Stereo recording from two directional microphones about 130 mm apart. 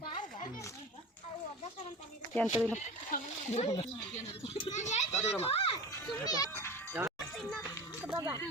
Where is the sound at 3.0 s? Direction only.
75° left (ahead or behind); by 4.7 s 45° left (ahead or behind).